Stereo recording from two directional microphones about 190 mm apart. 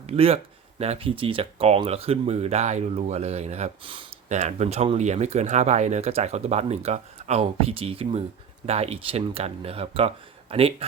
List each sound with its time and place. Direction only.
0.1 s speech: 30° right (ahead or behind)